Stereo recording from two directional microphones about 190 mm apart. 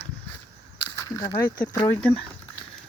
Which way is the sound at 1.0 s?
15° left (ahead or behind).